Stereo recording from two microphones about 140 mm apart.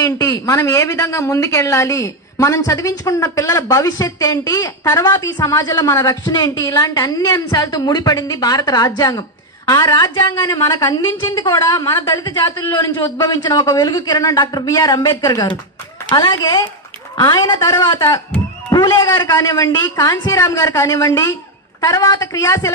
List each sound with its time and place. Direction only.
0.0 s a woman's voice: 25° left (ahead or behind)